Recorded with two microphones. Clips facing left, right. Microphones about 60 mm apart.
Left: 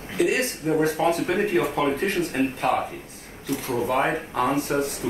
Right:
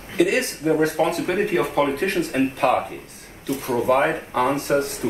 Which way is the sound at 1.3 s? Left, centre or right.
Right.